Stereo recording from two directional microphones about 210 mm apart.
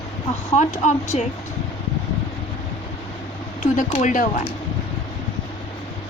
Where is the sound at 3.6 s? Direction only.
40° left (ahead or behind).